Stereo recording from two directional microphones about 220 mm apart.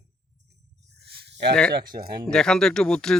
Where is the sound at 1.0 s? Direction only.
50° right (ahead or behind).